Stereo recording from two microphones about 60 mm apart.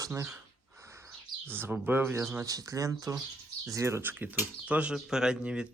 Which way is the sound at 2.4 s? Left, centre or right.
Right.